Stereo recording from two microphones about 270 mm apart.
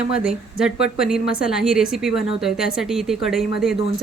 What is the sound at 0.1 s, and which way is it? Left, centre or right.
A woman's voice, centre.